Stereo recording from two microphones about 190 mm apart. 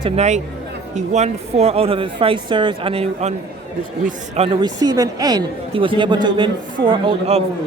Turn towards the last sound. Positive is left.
turn(degrees=-25)  # may be behind; listen again after turning